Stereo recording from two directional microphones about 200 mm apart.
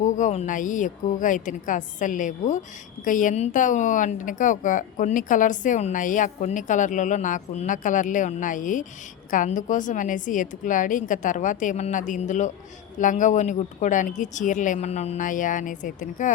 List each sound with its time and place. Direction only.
0.0 s a woman's voice: 35° left (ahead or behind)